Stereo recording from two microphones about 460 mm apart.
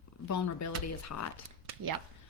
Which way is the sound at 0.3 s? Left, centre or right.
Left.